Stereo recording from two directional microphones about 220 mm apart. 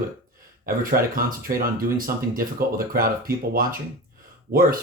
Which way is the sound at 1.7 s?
40° right (ahead or behind).